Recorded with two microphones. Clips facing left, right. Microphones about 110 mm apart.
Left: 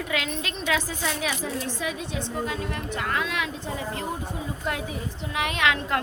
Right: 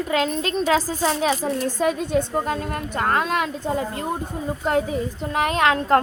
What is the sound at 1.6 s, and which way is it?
A woman's voice, 45° right (ahead or behind).